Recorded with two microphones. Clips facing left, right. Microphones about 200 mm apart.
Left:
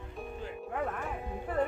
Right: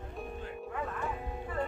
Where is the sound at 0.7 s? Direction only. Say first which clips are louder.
Left 2 dB; 65° left (ahead or behind).